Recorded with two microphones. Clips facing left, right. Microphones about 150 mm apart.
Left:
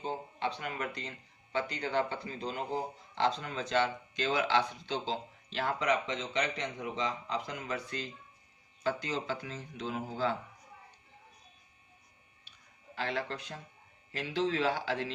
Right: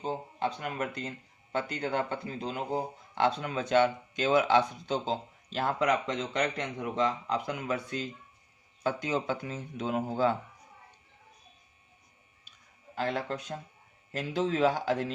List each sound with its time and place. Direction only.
0.0 s speech: 45° right (ahead or behind)
3.2 s speech: 60° right (ahead or behind)
13.0 s speech: 45° right (ahead or behind)